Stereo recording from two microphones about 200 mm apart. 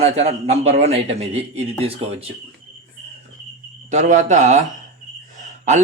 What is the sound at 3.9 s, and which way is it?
Speech, 35° right (ahead or behind).